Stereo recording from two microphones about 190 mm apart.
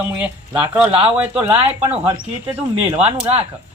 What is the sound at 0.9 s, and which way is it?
Speech, 30° right (ahead or behind).